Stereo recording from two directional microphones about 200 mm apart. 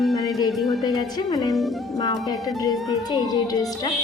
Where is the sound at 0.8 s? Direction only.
20° left (ahead or behind).